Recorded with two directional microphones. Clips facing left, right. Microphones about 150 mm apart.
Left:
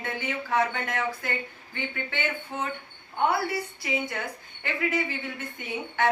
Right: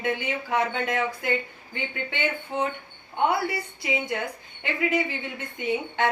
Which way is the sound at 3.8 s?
20° right (ahead or behind).